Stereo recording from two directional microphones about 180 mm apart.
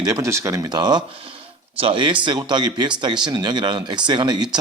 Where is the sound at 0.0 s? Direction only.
20° right (ahead or behind).